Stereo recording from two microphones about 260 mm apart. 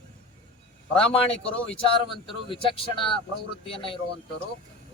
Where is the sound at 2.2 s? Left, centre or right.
Centre.